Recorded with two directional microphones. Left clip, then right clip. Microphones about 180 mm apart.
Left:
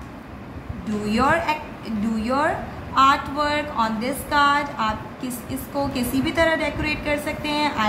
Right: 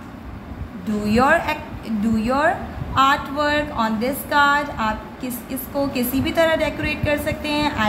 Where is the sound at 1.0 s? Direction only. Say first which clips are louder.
Right 3 dB; 25° right (ahead or behind).